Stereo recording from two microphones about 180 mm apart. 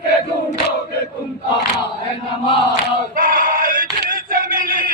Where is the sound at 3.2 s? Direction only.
50° right (ahead or behind).